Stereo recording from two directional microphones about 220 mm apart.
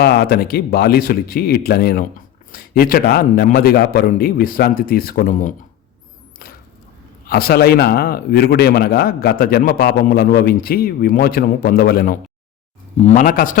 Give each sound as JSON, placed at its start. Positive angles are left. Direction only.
{"t": 0.3, "sound": "a man's voice", "side_deg": 45}
{"t": 7.3, "sound": "a man's voice", "side_deg": 45}